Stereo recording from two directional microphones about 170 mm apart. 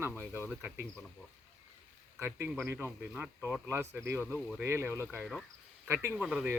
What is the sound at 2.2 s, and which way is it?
Speech, 15° right (ahead or behind).